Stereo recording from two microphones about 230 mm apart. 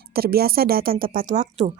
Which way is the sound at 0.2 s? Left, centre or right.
Right.